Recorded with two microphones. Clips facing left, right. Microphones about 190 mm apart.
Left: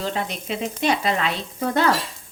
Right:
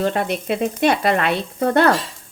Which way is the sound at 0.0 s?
55° right (ahead or behind).